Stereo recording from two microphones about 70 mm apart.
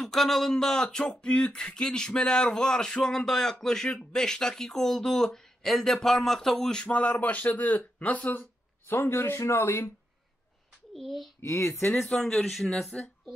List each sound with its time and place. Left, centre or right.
0.0 s speech: centre; by 8.5 s left
8.8 s speech: left
11.0 s a child's voice: centre
11.4 s speech: left
11.9 s speech: centre